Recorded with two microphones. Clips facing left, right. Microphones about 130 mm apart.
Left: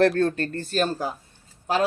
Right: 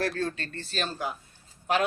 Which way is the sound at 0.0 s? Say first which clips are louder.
Left 10 dB; 60° left (ahead or behind).